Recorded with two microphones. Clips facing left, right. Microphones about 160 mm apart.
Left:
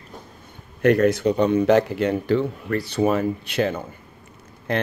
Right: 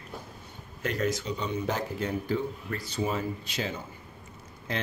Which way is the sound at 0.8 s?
65° left (ahead or behind).